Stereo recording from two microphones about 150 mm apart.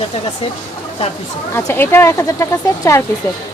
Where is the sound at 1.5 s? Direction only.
15° left (ahead or behind).